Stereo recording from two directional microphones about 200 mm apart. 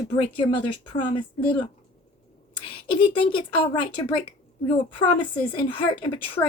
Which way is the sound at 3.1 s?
25° left (ahead or behind).